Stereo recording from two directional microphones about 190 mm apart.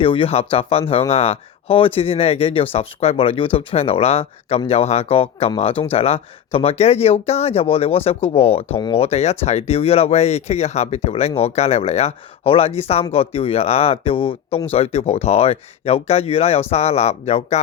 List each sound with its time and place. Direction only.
0.0 s speech: 30° left (ahead or behind)